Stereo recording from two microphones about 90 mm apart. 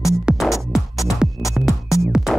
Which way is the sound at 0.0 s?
Centre (ahead or behind).